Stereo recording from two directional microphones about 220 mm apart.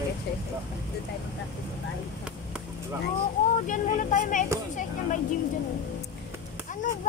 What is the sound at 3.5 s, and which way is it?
Speech, 35° left (ahead or behind).